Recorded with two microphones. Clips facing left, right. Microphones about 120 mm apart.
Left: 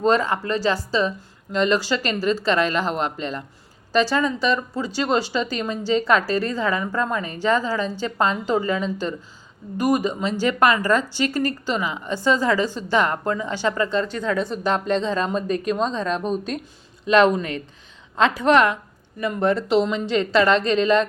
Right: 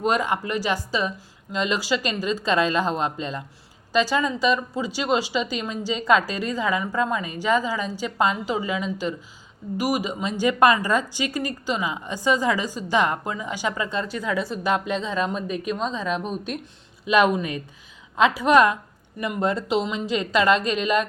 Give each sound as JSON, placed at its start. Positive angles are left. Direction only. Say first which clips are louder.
{"t": 0.0, "sound": "a woman's voice", "louder": "left 3 dB", "side_deg": -15}